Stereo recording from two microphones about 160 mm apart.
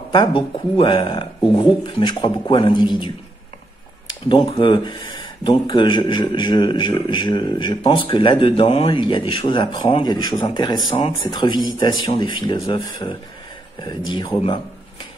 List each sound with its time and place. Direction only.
0.1 s speech: 30° left (ahead or behind)
4.3 s speech: 30° left (ahead or behind)